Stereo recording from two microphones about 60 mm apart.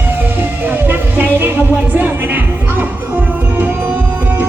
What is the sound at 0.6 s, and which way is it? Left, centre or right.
Music, right.